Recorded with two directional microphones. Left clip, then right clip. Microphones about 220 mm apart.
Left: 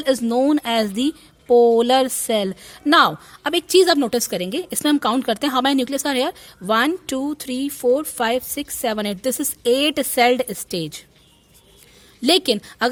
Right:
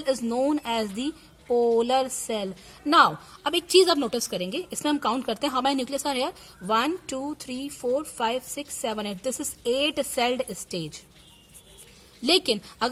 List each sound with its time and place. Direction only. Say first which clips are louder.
0.0 s speech: left 7 dB; 30° left (ahead or behind)
12.2 s speech: left 5 dB; 30° left (ahead or behind)